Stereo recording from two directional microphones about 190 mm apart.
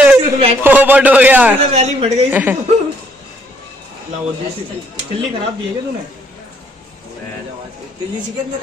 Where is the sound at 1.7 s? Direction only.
35° right (ahead or behind).